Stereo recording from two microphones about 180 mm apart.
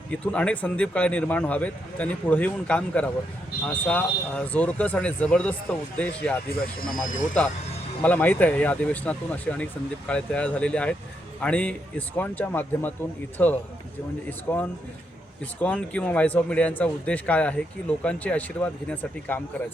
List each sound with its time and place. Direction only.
0.1 s a man's voice: 5° left (ahead or behind)
6.5 s speech: 55° left (ahead or behind)
8.0 s a man's voice: 10° left (ahead or behind)